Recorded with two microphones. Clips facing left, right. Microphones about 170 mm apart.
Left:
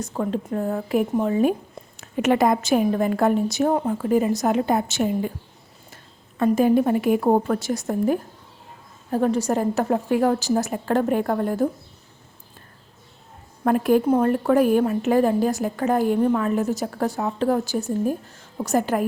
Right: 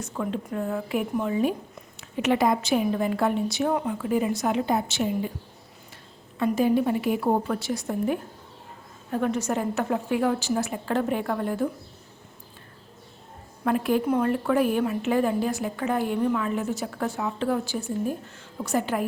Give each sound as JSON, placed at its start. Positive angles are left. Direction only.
{"t": 0.0, "sound": "a woman's voice", "side_deg": 40}
{"t": 6.4, "sound": "a woman's voice", "side_deg": 50}
{"t": 13.7, "sound": "a woman's voice", "side_deg": 45}